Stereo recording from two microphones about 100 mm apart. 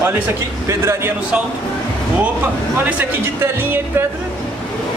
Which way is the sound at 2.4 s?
15° right (ahead or behind).